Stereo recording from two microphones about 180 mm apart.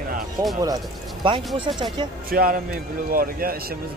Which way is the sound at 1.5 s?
25° right (ahead or behind).